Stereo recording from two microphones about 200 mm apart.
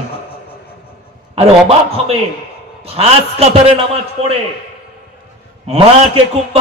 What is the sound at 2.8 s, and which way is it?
Speech, 30° right (ahead or behind).